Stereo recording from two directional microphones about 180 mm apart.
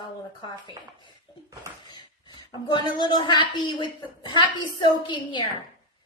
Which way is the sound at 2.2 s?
25° left (ahead or behind).